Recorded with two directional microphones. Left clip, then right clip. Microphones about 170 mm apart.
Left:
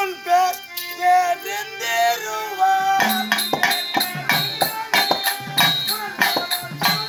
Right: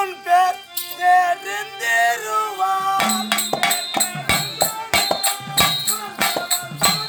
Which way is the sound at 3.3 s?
40° right (ahead or behind).